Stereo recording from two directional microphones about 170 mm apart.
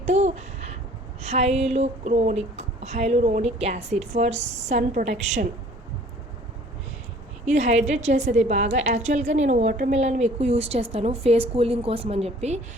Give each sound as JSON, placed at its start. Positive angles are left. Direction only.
{"t": 0.0, "sound": "a sound", "side_deg": -40}
{"t": 1.2, "sound": "a woman's voice", "side_deg": -40}
{"t": 7.4, "sound": "a woman's voice", "side_deg": -40}